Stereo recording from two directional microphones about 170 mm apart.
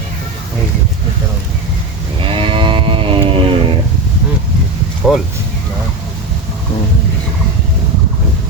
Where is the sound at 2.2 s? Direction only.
30° right (ahead or behind).